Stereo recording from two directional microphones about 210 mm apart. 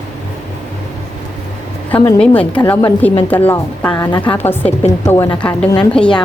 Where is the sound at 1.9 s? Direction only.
5° left (ahead or behind).